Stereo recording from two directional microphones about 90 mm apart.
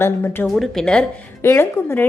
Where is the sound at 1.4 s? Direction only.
25° left (ahead or behind).